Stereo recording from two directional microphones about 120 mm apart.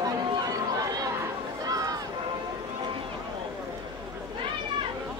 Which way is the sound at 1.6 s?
30° right (ahead or behind).